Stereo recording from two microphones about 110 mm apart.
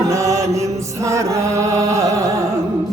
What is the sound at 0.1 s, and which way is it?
Chant, 30° right (ahead or behind).